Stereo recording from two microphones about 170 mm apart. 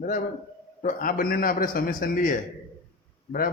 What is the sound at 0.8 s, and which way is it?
A man's voice, 50° left (ahead or behind).